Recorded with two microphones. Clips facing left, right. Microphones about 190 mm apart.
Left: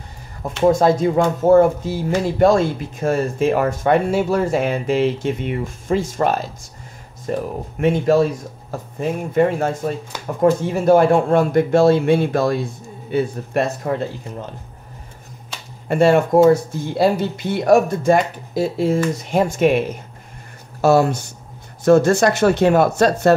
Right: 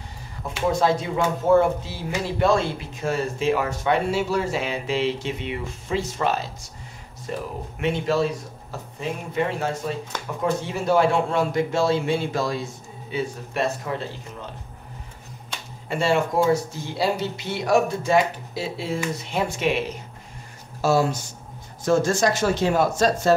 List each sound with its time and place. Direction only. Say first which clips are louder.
0.7 s speech: left 7 dB; 45° left (ahead or behind)
15.9 s speech: left 8 dB; 55° left (ahead or behind)
20.8 s speech: left 6 dB; 60° left (ahead or behind)